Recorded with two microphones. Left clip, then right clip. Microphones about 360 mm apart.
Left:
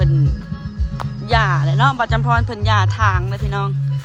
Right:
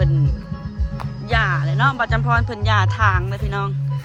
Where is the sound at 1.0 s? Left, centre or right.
Centre.